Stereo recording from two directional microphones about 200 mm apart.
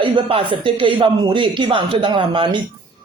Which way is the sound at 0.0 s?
25° right (ahead or behind).